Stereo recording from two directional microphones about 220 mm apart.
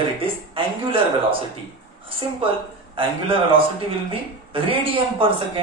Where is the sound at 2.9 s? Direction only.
25° right (ahead or behind).